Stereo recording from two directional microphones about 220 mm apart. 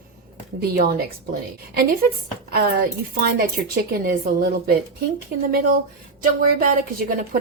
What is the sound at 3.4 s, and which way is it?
A woman's voice, 40° right (ahead or behind).